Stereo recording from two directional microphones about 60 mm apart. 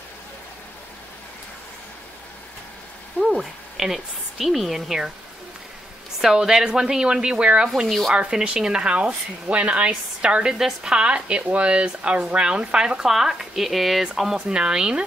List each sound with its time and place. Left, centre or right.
3.2 s a woman's voice: centre
6.2 s speech: centre
8.1 s speech: centre